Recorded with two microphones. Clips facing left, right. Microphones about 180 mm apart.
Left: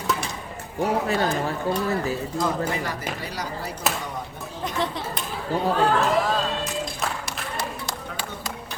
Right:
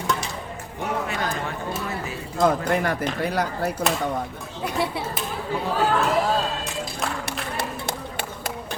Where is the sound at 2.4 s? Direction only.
55° right (ahead or behind).